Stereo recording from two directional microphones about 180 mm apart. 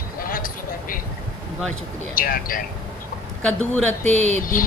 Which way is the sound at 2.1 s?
50° left (ahead or behind).